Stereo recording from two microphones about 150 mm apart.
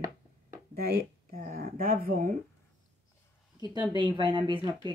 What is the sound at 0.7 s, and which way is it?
Speech, 90° right.